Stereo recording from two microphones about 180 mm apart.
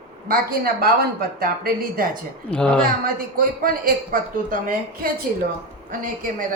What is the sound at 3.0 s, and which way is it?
A woman's voice, 50° right (ahead or behind).